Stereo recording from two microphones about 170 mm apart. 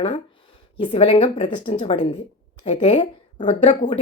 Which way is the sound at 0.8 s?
35° left (ahead or behind).